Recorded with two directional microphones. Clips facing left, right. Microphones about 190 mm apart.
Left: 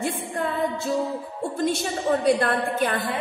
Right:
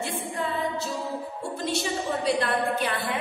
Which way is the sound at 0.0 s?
50° left (ahead or behind).